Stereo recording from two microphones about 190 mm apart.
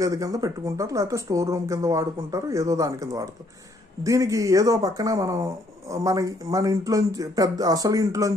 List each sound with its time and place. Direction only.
0.0 s speech: 20° right (ahead or behind)